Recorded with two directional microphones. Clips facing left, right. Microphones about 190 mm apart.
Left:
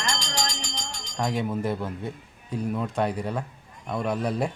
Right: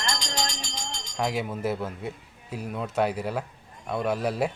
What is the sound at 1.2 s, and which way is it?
A man's voice, 5° right (ahead or behind).